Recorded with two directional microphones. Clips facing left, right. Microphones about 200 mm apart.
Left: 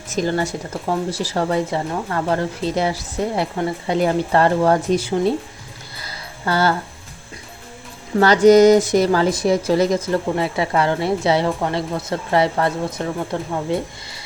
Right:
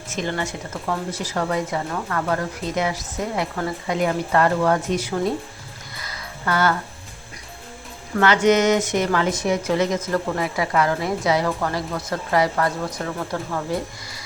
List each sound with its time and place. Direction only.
0.1 s speech: 35° left (ahead or behind)
6.0 s music: 30° left (ahead or behind)
8.2 s speech: 35° left (ahead or behind)